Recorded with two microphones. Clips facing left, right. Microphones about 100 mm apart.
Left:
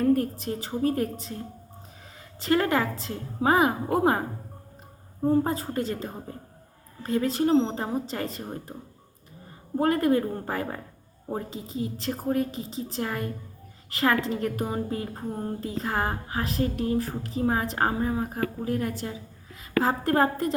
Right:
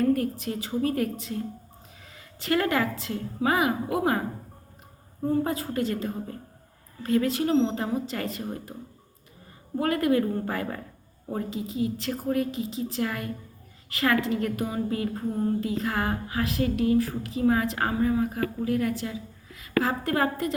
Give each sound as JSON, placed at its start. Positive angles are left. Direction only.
{"t": 0.0, "sound": "a woman's voice", "side_deg": 40}
{"t": 2.1, "sound": "a woman's voice", "side_deg": 35}
{"t": 5.2, "sound": "a woman's voice", "side_deg": 30}
{"t": 9.7, "sound": "a woman's voice", "side_deg": 35}